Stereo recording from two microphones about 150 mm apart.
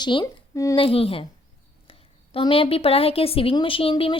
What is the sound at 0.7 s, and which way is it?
Speech, 40° left (ahead or behind).